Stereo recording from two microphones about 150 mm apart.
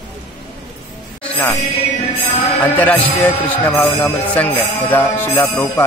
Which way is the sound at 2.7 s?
10° left (ahead or behind).